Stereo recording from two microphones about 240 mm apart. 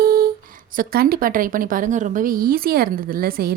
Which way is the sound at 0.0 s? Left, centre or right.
Right.